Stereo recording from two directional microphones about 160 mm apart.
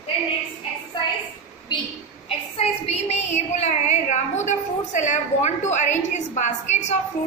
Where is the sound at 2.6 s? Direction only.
40° left (ahead or behind).